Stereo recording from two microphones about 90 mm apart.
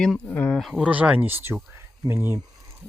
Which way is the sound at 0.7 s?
15° right (ahead or behind).